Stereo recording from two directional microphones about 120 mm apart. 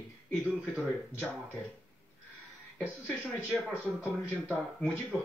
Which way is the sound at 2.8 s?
15° left (ahead or behind).